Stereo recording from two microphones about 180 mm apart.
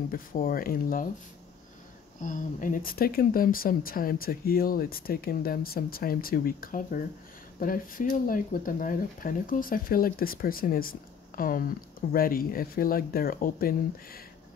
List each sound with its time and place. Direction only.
0.1 s speech: 50° left (ahead or behind)
2.2 s speech: 45° left (ahead or behind)